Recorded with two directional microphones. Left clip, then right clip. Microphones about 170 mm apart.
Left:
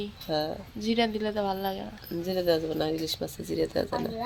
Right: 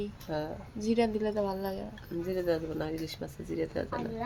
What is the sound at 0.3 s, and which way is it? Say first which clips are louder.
Speech: left 7 dB; 40° left (ahead or behind).